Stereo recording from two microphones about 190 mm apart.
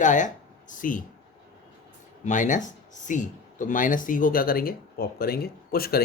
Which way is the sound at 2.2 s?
40° left (ahead or behind).